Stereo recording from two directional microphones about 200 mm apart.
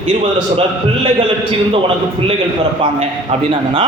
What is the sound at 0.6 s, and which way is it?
Speech, 25° right (ahead or behind).